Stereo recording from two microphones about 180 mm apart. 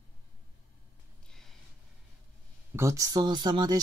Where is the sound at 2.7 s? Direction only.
15° right (ahead or behind).